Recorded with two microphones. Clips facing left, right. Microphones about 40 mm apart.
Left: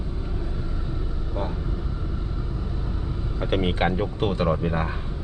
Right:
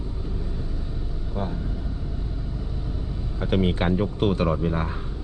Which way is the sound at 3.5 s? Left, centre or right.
Left.